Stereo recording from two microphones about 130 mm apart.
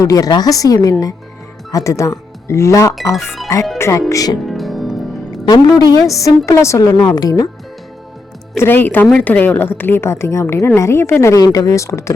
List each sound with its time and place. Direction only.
0.0 s a woman's voice: 30° left (ahead or behind)
4.4 s music: centre (ahead or behind)
5.3 s a woman's voice: 30° left (ahead or behind)
8.5 s a woman's voice: 15° left (ahead or behind)